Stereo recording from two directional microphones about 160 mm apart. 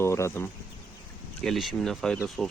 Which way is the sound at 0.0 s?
15° left (ahead or behind).